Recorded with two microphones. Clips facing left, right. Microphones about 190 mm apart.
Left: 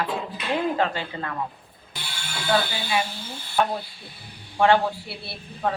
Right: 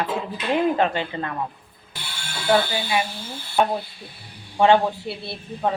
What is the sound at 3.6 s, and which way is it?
Speech, 20° right (ahead or behind).